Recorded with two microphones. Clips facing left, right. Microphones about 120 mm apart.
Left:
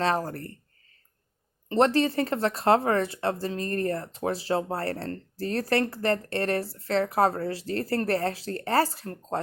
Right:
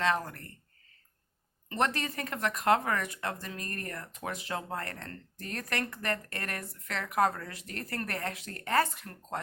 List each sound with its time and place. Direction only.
0.0 s speech: 35° left (ahead or behind)
1.7 s speech: 30° left (ahead or behind)